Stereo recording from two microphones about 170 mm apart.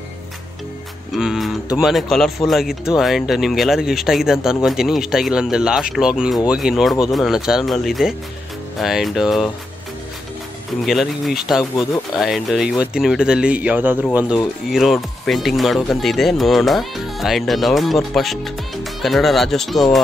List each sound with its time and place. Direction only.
1.1 s music: centre (ahead or behind)
1.8 s speech: centre (ahead or behind)
10.9 s speech: centre (ahead or behind)